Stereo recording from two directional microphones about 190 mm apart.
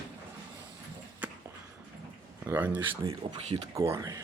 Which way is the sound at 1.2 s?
10° right (ahead or behind).